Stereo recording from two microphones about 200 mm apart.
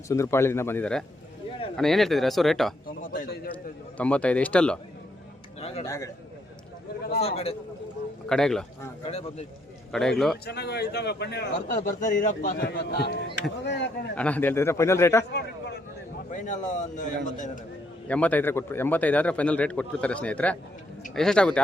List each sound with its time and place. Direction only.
0.1 s a man's voice: 15° left (ahead or behind)
3.0 s a sound: 45° left (ahead or behind)
3.9 s a man's voice: 5° left (ahead or behind)
5.5 s a sound: 30° left (ahead or behind)
5.8 s a man's voice: 15° left (ahead or behind)
7.2 s a man's voice: 30° left (ahead or behind)
8.3 s speech: 5° left (ahead or behind)
9.9 s speech: centre (ahead or behind)
10.4 s a man's voice: 55° left (ahead or behind)
11.5 s a man's voice: 40° left (ahead or behind); by 13.9 s 60° left (ahead or behind)
14.2 s a man's voice: 5° left (ahead or behind)
15.2 s a sound: 55° left (ahead or behind)
16.3 s a man's voice: 40° left (ahead or behind)
18.1 s a man's voice: 5° left (ahead or behind)